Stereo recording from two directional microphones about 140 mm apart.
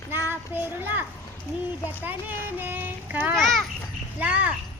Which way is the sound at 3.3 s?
Centre (ahead or behind).